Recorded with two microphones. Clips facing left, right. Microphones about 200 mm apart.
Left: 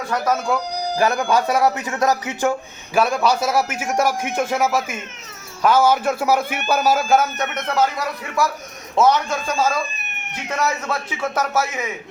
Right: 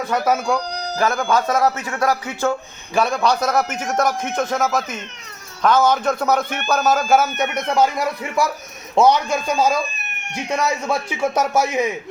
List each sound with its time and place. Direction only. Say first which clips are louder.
0.1 s a man's voice: right 1 dB; centre (ahead or behind); by 2.6 s 15° left (ahead or behind)
2.9 s a man's voice: even; 5° left (ahead or behind)
7.2 s a man's voice: right 2 dB; 10° right (ahead or behind)
9.0 s a man's voice: right 2 dB; 15° right (ahead or behind)